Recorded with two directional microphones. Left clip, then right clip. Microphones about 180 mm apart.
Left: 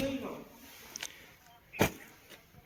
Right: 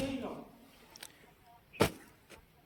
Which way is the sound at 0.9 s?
20° right (ahead or behind).